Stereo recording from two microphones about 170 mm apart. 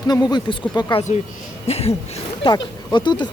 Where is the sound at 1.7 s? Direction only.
40° left (ahead or behind).